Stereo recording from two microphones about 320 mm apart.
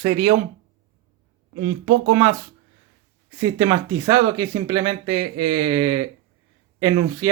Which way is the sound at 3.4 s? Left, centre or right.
Centre.